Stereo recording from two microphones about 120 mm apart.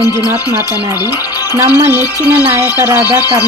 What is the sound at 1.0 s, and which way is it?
Music, 35° left (ahead or behind).